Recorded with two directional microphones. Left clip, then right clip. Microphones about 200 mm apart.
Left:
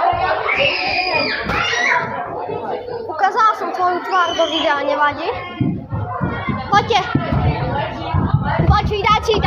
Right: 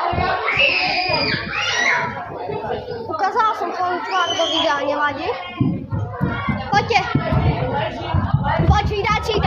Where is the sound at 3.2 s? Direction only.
25° left (ahead or behind).